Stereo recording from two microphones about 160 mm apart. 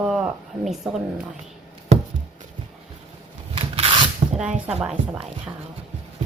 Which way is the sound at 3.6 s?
35° right (ahead or behind).